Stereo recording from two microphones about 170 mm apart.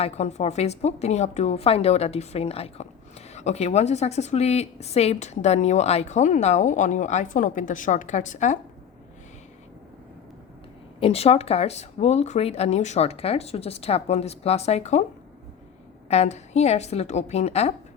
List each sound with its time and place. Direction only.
0.0 s a woman's voice: 40° left (ahead or behind)
11.0 s a woman's voice: 35° left (ahead or behind)
16.0 s a woman's voice: 40° left (ahead or behind)